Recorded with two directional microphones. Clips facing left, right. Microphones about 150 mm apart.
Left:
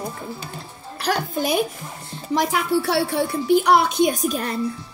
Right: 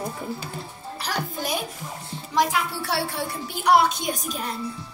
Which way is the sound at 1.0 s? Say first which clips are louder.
Left 7 dB; 65° left (ahead or behind).